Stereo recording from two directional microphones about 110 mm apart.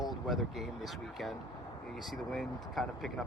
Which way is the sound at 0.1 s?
Centre (ahead or behind).